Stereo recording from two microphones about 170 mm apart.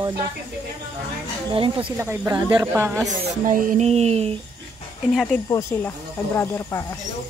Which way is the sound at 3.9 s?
40° right (ahead or behind).